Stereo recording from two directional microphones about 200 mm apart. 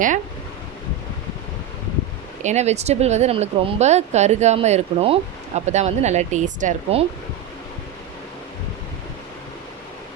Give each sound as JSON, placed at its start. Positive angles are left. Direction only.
{"t": 2.4, "sound": "speech", "side_deg": -35}